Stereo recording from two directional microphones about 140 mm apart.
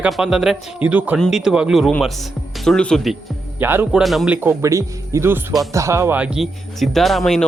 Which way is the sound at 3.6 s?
15° right (ahead or behind).